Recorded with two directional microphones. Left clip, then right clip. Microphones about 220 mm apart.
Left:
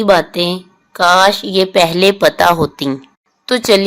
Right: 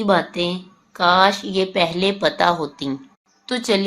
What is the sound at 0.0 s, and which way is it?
Speech, 45° left (ahead or behind).